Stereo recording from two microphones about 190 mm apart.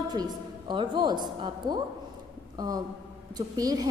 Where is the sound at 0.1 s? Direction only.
25° right (ahead or behind).